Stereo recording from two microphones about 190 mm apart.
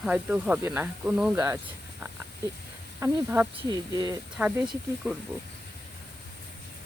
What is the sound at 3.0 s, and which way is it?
Speech, 10° right (ahead or behind).